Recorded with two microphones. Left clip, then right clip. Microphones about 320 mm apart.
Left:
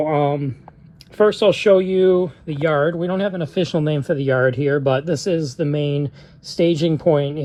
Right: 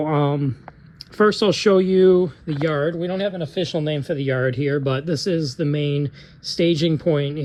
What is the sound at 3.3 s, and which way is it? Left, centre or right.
Speech, left.